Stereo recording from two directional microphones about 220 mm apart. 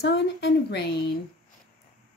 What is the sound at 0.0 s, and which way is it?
Speech, 50° left (ahead or behind).